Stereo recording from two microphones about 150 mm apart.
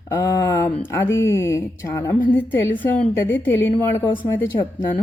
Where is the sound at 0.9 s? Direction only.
15° left (ahead or behind).